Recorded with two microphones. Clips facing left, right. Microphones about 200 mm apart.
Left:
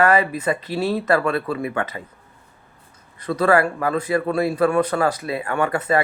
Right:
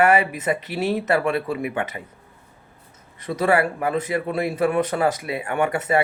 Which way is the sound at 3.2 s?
15° right (ahead or behind).